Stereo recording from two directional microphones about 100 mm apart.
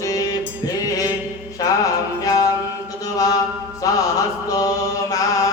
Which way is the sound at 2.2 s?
40° left (ahead or behind).